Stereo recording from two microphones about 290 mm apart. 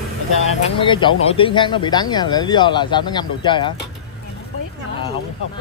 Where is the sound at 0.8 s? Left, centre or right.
Centre.